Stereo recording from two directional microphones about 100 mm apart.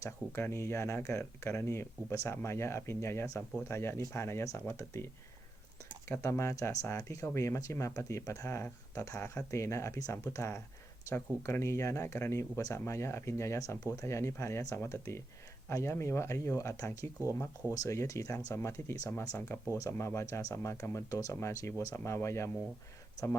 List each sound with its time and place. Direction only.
0.0 s speech: 25° left (ahead or behind)